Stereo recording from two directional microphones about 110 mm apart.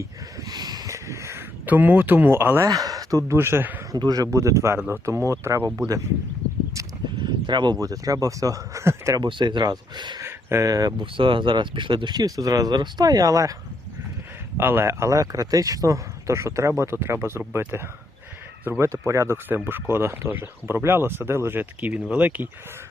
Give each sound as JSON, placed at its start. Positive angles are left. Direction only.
{"t": 0.3, "sound": "a sound", "side_deg": -35}
{"t": 2.6, "sound": "speech", "side_deg": -35}
{"t": 3.9, "sound": "speech", "side_deg": -35}
{"t": 7.2, "sound": "speech", "side_deg": -45}
{"t": 9.2, "sound": "speech", "side_deg": -40}
{"t": 10.2, "sound": "speech", "side_deg": -25}
{"t": 11.0, "sound": "speech", "side_deg": -50}
{"t": 14.6, "sound": "speech", "side_deg": -20}